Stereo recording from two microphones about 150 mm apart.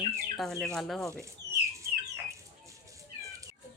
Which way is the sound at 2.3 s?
20° right (ahead or behind).